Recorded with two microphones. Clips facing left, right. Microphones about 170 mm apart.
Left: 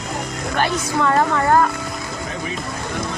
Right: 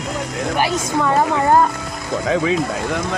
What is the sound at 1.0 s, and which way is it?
Speech, 15° right (ahead or behind).